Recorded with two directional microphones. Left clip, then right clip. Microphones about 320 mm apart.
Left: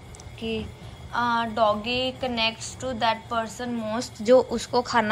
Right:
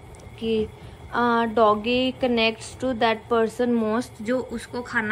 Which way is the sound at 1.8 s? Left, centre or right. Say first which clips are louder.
Right 3 dB; right.